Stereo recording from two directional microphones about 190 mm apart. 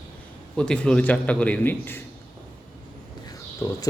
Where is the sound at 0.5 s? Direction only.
5° left (ahead or behind).